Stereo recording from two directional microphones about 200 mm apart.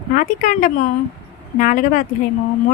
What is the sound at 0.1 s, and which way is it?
A woman's voice, 40° left (ahead or behind).